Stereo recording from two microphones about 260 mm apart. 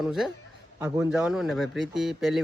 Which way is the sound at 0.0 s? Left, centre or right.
Centre.